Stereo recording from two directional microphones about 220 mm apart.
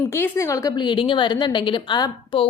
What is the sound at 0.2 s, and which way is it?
A woman's voice, 15° left (ahead or behind).